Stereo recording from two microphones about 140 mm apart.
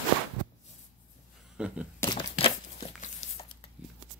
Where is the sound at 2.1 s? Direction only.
40° left (ahead or behind).